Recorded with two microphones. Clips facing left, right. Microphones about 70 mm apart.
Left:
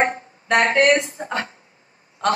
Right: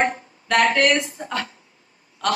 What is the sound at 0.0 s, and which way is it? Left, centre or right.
A woman's voice, left.